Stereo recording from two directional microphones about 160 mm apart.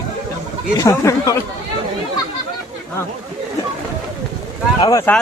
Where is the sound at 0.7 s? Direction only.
20° left (ahead or behind).